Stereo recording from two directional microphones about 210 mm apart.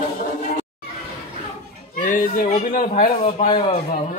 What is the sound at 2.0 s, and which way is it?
Speech, 40° left (ahead or behind).